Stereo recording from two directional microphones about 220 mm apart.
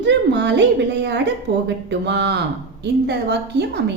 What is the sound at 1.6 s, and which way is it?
A woman's voice, 50° right (ahead or behind).